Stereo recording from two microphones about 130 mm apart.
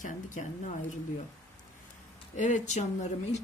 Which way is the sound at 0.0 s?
75° left (ahead or behind).